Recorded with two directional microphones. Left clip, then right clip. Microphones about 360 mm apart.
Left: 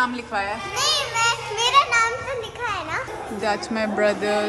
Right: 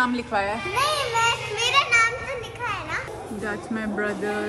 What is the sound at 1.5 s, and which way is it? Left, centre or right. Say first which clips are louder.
Children playing: left 3 dB; centre.